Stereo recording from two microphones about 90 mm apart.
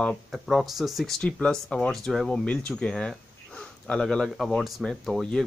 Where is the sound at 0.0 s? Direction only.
Centre (ahead or behind).